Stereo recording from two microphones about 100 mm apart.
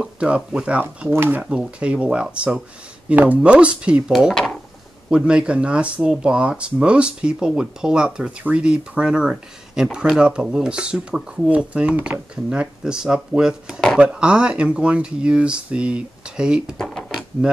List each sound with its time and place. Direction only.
0.0 s speech: 10° right (ahead or behind)
1.1 s speech: 25° right (ahead or behind)
1.4 s speech: 10° right (ahead or behind)
4.1 s speech: centre (ahead or behind)
5.1 s speech: 10° right (ahead or behind)
16.7 s a sound: 5° left (ahead or behind)
17.4 s speech: 10° right (ahead or behind)